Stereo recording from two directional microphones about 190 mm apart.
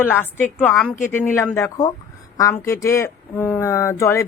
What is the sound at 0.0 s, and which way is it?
Speech, 10° left (ahead or behind).